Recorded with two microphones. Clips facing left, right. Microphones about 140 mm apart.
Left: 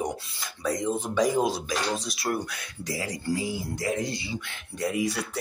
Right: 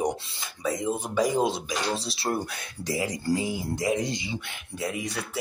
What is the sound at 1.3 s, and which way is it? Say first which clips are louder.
Speech: even; 25° right (ahead or behind).